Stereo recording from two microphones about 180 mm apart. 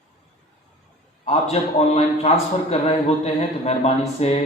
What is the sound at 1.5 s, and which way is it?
A man's voice, 35° left (ahead or behind).